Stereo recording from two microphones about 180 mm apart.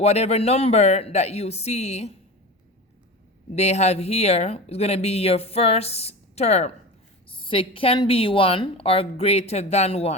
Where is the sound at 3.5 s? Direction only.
40° left (ahead or behind).